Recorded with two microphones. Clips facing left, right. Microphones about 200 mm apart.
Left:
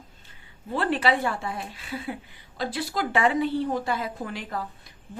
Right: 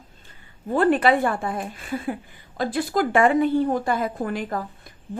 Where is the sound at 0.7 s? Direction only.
50° right (ahead or behind).